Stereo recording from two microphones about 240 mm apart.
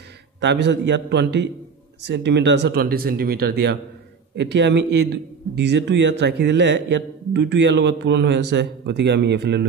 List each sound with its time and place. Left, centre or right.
0.4 s a man's voice: right